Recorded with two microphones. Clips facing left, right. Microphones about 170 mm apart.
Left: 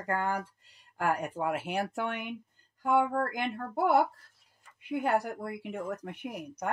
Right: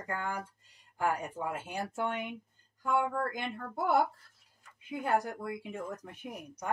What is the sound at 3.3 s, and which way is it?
Speech, 65° left (ahead or behind).